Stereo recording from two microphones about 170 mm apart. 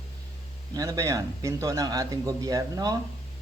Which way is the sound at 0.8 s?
20° right (ahead or behind).